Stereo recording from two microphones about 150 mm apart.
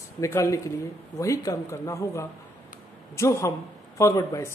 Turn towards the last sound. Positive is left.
turn(degrees=20)  # may be behind; listen again after turning